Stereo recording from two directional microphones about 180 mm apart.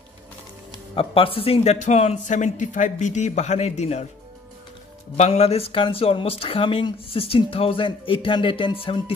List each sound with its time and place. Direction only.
0.9 s speech: 30° left (ahead or behind)
5.1 s speech: 35° left (ahead or behind)